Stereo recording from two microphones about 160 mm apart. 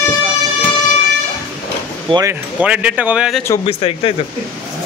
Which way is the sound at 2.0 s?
25° right (ahead or behind).